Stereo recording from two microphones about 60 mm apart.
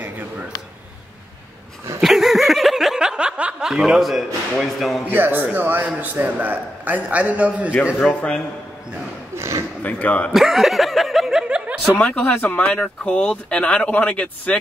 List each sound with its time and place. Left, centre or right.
2.0 s snicker: centre
3.6 s speech: centre
5.1 s a man's voice: right
8.0 s speech: centre
9.8 s speech: left
10.3 s snicker: centre
11.4 s snicker: right
12.1 s speech: left